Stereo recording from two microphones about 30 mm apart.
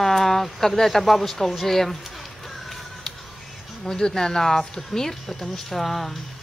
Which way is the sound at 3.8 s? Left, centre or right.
Left.